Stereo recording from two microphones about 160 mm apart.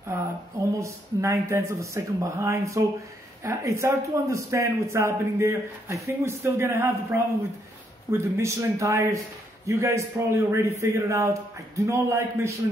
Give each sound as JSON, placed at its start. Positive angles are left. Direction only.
{"t": 0.7, "sound": "a man's voice", "side_deg": -20}